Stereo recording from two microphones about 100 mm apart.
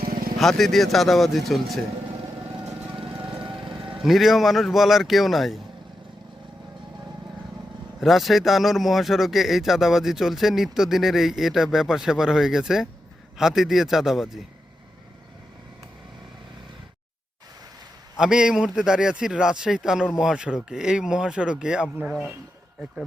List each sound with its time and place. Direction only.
0.3 s speech: centre (ahead or behind)
2.6 s vehicle: 5° right (ahead or behind)
3.0 s vehicle: 65° right (ahead or behind)
3.4 s a sound: 55° right (ahead or behind)
4.0 s speech: centre (ahead or behind)
8.0 s speech: centre (ahead or behind)
18.2 s a man's voice: 5° right (ahead or behind)